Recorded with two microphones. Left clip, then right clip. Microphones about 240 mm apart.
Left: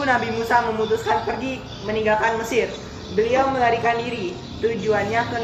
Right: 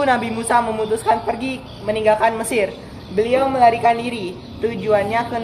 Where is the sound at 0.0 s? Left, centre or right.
Right.